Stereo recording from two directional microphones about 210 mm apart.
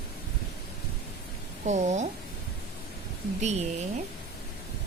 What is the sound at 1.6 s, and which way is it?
Speech, 35° right (ahead or behind).